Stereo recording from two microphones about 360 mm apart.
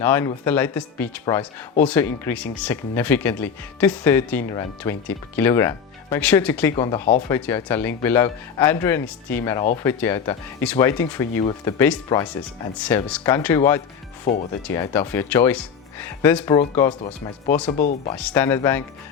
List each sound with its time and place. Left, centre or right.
0.0 s speech: centre
14.3 s speech: left
14.7 s speech: centre
17.7 s speech: centre
18.1 s speech: centre